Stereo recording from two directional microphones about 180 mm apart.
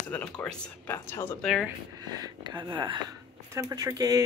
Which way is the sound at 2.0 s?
20° right (ahead or behind).